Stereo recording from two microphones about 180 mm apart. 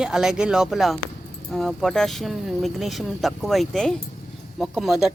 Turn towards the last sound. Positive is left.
turn(degrees=0)  # may be behind; listen again after turning